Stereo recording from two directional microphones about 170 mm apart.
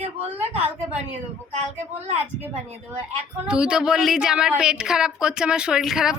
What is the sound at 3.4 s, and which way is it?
A woman's voice, 5° right (ahead or behind).